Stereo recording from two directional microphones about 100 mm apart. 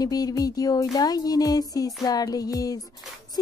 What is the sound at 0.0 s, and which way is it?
Speech, 40° left (ahead or behind).